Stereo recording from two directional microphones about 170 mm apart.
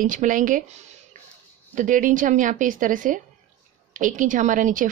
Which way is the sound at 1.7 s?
50° right (ahead or behind).